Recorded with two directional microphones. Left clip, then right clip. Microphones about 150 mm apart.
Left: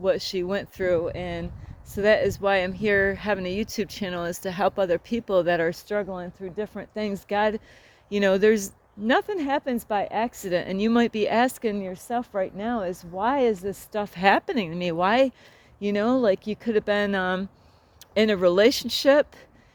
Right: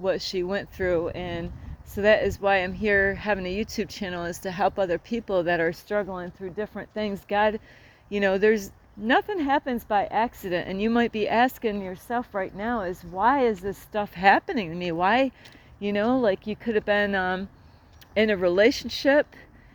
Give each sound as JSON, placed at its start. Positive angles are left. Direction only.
{"t": 0.0, "sound": "speech", "side_deg": 30}